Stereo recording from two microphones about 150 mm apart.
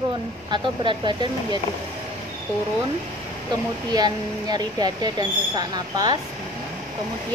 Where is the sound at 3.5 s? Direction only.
25° right (ahead or behind).